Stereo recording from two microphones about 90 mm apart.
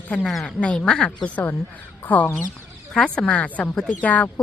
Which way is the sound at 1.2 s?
20° left (ahead or behind).